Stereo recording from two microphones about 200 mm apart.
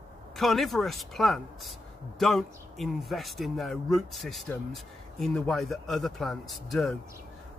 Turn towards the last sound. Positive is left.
turn(degrees=0)  # may be behind; listen again after turning